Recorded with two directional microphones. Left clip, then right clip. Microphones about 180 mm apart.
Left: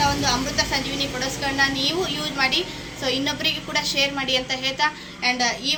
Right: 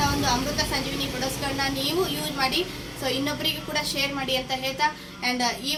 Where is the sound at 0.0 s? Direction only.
30° left (ahead or behind).